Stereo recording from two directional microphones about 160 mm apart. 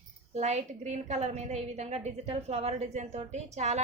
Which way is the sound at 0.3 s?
45° right (ahead or behind).